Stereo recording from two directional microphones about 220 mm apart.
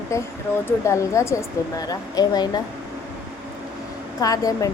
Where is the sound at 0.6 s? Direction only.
15° left (ahead or behind).